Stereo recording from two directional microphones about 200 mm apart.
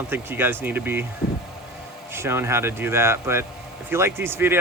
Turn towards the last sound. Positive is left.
turn(degrees=-10)  # may be behind; listen again after turning